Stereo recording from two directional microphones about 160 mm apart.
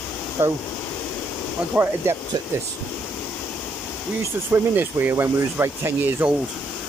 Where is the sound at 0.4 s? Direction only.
15° right (ahead or behind).